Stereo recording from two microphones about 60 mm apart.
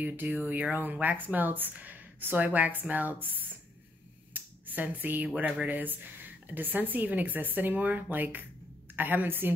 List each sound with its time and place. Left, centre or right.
0.1 s speech: right